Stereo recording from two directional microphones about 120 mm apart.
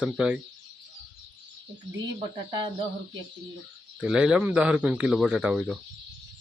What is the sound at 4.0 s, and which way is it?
Speech, 10° right (ahead or behind).